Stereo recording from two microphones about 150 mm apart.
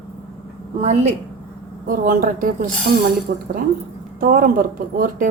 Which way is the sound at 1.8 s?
70° right (ahead or behind).